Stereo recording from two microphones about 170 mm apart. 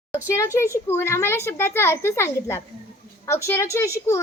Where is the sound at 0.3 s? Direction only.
15° left (ahead or behind).